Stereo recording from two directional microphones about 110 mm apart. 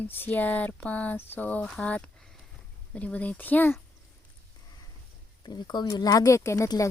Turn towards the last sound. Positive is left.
turn(degrees=25)  # may be behind; listen again after turning